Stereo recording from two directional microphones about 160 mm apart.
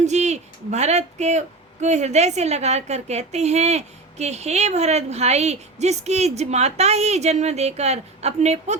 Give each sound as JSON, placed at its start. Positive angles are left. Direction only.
{"t": 0.0, "sound": "speech", "side_deg": -45}